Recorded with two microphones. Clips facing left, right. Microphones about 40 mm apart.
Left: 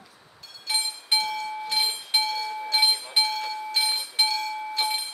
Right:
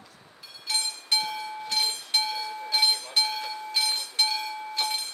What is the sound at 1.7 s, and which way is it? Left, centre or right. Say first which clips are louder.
Train: left 1 dB; centre.